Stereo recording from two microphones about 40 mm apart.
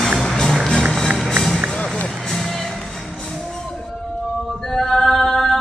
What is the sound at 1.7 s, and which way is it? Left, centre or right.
Music, left.